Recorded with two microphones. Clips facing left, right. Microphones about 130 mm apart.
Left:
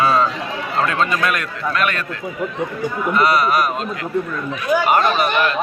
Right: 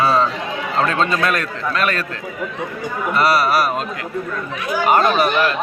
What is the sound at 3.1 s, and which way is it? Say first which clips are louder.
Speech: right 1 dB; 35° right (ahead or behind).